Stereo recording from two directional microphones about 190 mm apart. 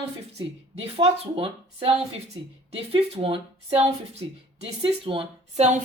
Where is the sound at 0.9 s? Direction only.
30° right (ahead or behind).